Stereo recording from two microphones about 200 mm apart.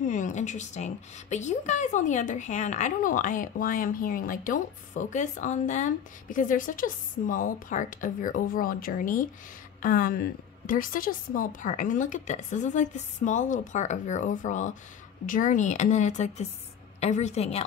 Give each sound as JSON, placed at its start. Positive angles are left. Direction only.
{"t": 0.0, "sound": "a woman's voice", "side_deg": 40}